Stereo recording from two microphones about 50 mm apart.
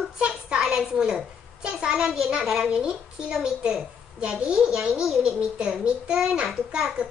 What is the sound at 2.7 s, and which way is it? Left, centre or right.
A child's voice, centre.